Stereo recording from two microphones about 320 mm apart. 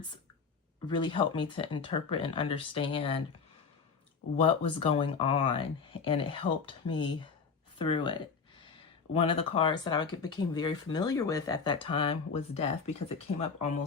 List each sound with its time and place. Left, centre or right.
0.9 s speech: centre
4.4 s speech: centre